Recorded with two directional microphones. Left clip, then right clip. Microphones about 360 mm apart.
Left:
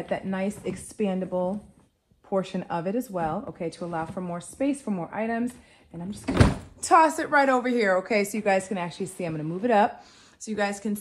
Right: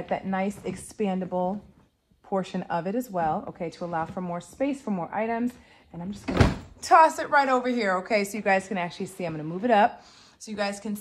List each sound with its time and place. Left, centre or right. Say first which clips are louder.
0.1 s a woman's voice: right 2 dB; centre
6.8 s a woman's voice: right 1 dB; right